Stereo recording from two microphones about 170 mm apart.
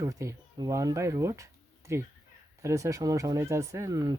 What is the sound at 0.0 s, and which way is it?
Speech, 20° right (ahead or behind).